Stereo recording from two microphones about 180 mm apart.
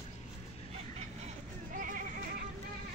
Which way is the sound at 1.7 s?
45° right (ahead or behind).